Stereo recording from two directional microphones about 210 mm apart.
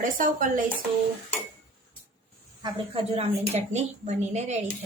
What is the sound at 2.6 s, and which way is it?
A woman's voice, 25° right (ahead or behind).